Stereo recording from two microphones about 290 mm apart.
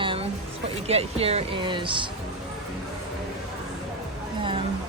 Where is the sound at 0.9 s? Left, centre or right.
Right.